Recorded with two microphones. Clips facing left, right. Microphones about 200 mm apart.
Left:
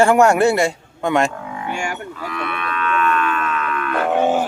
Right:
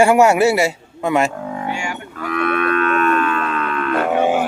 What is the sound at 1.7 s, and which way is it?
Cattle, 45° left (ahead or behind).